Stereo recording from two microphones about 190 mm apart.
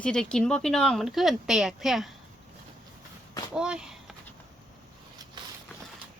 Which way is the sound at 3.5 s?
5° right (ahead or behind).